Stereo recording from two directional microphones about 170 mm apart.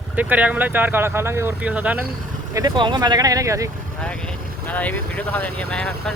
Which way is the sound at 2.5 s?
25° right (ahead or behind).